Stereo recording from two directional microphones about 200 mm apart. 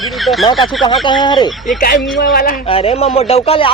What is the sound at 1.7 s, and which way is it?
Speech, 45° left (ahead or behind).